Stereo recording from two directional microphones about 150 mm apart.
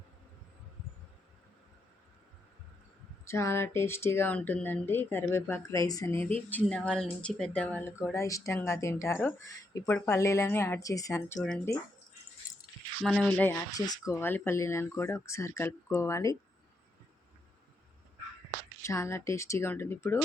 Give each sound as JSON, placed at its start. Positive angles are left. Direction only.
{"t": 3.2, "sound": "speech", "side_deg": 20}
{"t": 11.3, "sound": "speech", "side_deg": 5}
{"t": 13.0, "sound": "speech", "side_deg": 0}
{"t": 13.7, "sound": "speech", "side_deg": 25}
{"t": 18.8, "sound": "speech", "side_deg": 20}